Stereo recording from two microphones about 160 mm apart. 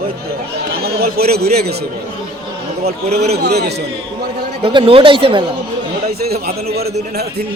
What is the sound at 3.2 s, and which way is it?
Speech, 85° right.